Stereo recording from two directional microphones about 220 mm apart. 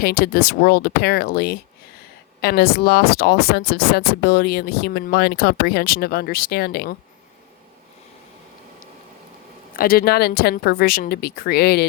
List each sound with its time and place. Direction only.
0.0 s speech: 45° left (ahead or behind)
9.7 s speech: 40° left (ahead or behind)